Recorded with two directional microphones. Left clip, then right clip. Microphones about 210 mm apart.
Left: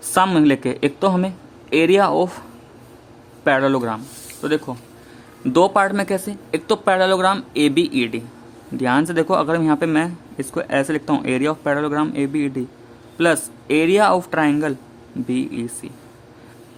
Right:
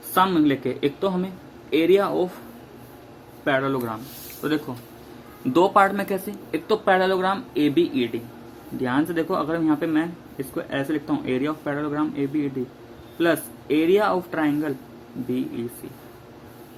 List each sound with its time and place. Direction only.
0.1 s speech: 45° left (ahead or behind)
3.4 s a man's voice: 45° left (ahead or behind)